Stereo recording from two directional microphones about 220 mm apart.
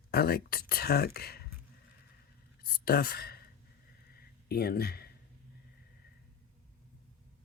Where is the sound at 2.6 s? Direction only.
45° left (ahead or behind).